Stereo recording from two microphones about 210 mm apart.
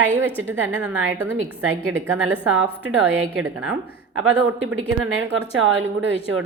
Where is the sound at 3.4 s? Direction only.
80° right.